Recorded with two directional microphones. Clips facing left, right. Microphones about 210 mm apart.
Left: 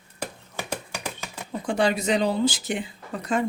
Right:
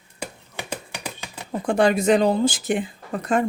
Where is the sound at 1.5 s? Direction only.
50° right (ahead or behind).